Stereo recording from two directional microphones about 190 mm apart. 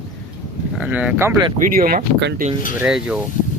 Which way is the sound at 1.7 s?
50° right (ahead or behind).